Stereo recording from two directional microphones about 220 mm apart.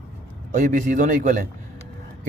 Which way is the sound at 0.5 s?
35° right (ahead or behind).